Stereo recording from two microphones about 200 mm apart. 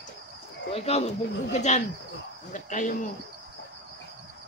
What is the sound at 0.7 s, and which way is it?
Speech, 30° left (ahead or behind).